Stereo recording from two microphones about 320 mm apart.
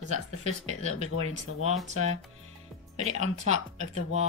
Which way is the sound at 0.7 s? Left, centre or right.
Left.